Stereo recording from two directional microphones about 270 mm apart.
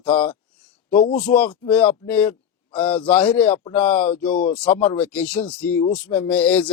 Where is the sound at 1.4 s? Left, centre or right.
Centre.